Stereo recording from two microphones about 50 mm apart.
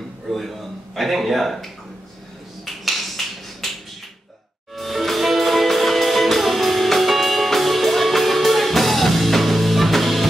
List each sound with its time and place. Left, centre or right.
0.3 s speech: centre
2.6 s a sound: centre
4.7 s music: centre